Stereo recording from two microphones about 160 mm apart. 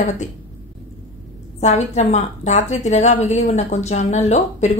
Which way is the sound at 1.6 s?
45° left (ahead or behind).